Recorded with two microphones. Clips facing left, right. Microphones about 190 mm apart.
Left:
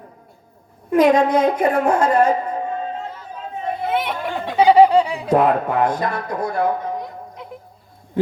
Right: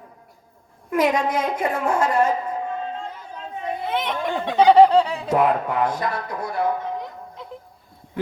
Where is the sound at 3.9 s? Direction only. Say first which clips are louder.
Right 1 dB; 5° left (ahead or behind); by 6.0 s 25° left (ahead or behind).